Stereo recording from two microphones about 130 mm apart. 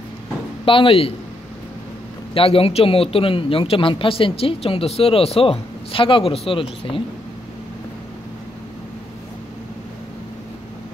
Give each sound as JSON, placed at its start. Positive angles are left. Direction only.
{"t": 0.7, "sound": "speech", "side_deg": 40}
{"t": 2.3, "sound": "speech", "side_deg": 45}